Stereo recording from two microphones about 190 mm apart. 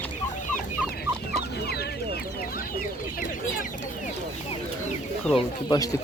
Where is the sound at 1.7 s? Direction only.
55° left (ahead or behind).